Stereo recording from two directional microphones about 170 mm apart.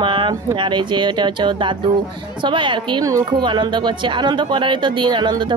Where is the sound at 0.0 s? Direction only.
30° right (ahead or behind).